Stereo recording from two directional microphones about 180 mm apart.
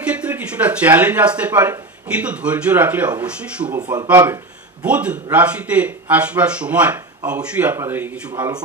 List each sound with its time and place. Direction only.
0.0 s speech: 5° right (ahead or behind)
3.7 s speech: 25° right (ahead or behind)
4.8 s speech: 5° right (ahead or behind)